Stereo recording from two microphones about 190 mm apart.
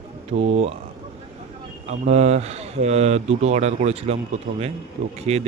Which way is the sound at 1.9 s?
35° right (ahead or behind).